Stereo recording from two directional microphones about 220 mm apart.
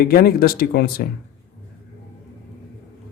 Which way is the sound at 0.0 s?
45° left (ahead or behind).